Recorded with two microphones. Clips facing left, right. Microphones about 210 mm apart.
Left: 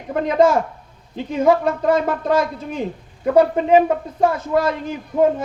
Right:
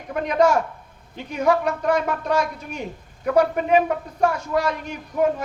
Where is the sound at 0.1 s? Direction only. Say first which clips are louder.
Left 3 dB; 25° left (ahead or behind).